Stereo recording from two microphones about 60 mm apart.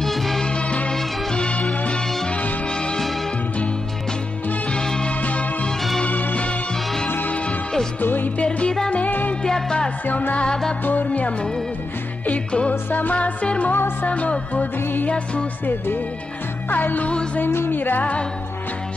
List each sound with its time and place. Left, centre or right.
0.0 s music: centre
0.5 s music: centre
4.7 s music: centre; by 8.5 s left
8.5 s music: centre
8.9 s music: left
9.4 s music: centre
10.0 s music: left